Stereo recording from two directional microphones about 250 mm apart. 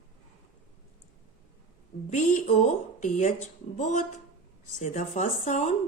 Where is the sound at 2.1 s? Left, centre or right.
Left.